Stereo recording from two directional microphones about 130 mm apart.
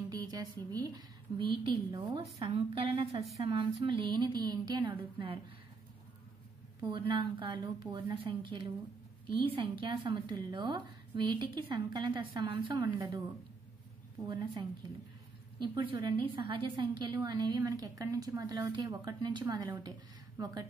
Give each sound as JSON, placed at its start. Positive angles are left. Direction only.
{"t": 0.1, "sound": "speech", "side_deg": -30}
{"t": 1.4, "sound": "a woman's voice", "side_deg": -40}
{"t": 6.8, "sound": "a woman's voice", "side_deg": -35}
{"t": 14.2, "sound": "a woman's voice", "side_deg": -40}